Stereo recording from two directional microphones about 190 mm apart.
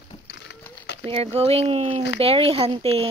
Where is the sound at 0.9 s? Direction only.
65° left (ahead or behind).